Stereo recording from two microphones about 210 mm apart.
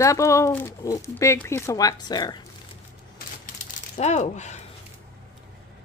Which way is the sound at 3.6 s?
35° left (ahead or behind).